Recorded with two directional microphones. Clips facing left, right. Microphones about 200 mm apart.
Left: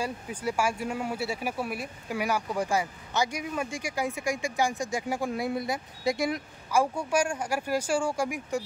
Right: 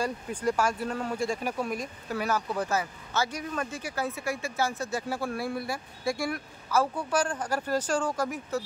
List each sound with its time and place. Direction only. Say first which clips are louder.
0.0 s speech: right 3 dB; 10° left (ahead or behind)